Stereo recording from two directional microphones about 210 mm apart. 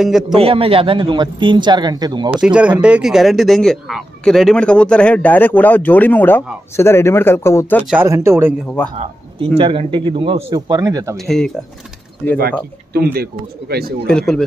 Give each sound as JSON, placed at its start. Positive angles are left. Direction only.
{"t": 0.0, "sound": "speech", "side_deg": 0}
{"t": 0.4, "sound": "a man's voice", "side_deg": -25}
{"t": 2.3, "sound": "speech", "side_deg": -5}
{"t": 7.8, "sound": "speech", "side_deg": -5}
{"t": 8.6, "sound": "speech", "side_deg": 5}
{"t": 8.9, "sound": "a man's voice", "side_deg": -30}
{"t": 11.1, "sound": "speech", "side_deg": 0}
{"t": 12.9, "sound": "speech", "side_deg": -45}
{"t": 14.0, "sound": "speech", "side_deg": 0}